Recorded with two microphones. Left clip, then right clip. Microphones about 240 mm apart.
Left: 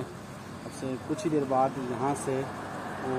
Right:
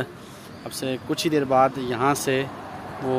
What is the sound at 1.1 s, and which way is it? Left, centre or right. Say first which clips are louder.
Speech: right 7 dB; right.